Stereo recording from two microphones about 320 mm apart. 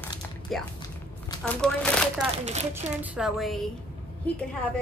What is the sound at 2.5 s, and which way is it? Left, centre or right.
Speech, right.